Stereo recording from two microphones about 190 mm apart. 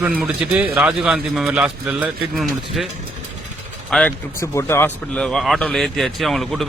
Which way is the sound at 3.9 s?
Centre (ahead or behind).